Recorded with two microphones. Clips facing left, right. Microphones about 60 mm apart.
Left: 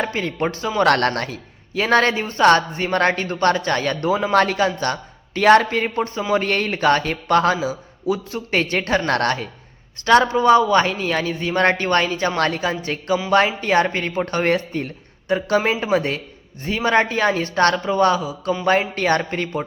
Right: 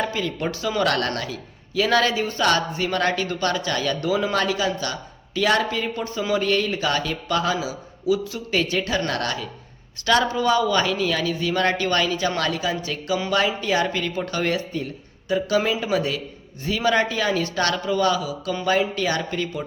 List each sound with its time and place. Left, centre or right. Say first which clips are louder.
0.0 s a man's voice: left 3 dB; left
0.8 s a man's voice: left 7 dB; left
10.1 s a man's voice: left 6 dB; left